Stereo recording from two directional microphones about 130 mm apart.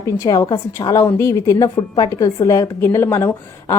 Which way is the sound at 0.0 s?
25° left (ahead or behind).